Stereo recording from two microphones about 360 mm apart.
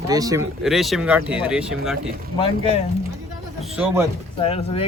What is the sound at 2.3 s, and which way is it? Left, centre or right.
Speech, centre.